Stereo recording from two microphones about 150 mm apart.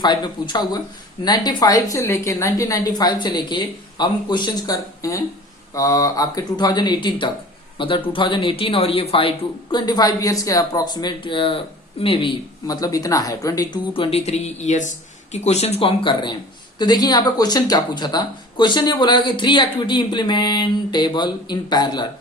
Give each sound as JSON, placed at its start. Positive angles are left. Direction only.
{"t": 0.0, "sound": "speech", "side_deg": 30}
{"t": 9.7, "sound": "speech", "side_deg": 30}
{"t": 13.9, "sound": "speech", "side_deg": 40}